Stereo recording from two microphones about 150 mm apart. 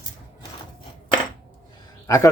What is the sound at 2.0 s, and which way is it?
Speech, 20° left (ahead or behind).